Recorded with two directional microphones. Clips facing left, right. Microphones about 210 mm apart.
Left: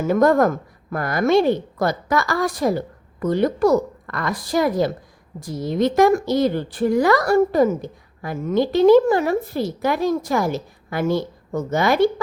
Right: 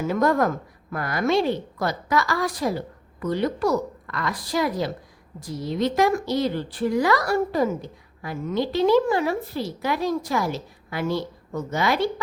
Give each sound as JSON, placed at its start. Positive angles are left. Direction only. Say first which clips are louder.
{"t": 0.1, "sound": "speech", "louder": "left 6 dB", "side_deg": 50}